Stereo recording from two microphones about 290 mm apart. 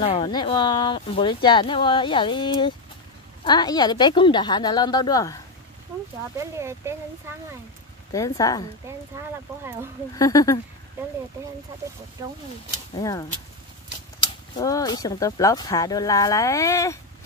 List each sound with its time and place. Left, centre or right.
0.0 s speech: centre
6.3 s speech: centre
8.1 s speech: centre
10.1 s speech: centre
12.9 s speech: centre